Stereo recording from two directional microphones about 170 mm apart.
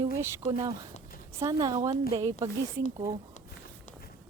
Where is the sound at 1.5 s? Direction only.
20° right (ahead or behind).